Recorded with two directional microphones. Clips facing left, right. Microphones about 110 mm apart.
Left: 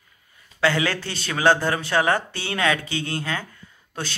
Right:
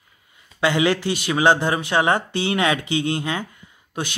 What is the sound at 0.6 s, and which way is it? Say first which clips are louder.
Speech: right 3 dB; 20° right (ahead or behind).